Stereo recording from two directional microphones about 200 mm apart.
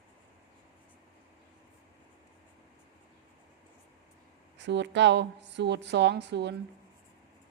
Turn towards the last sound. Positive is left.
turn(degrees=-60)  # may be behind; listen again after turning